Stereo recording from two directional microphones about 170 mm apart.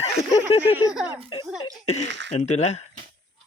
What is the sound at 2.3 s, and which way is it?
Speech, 40° left (ahead or behind).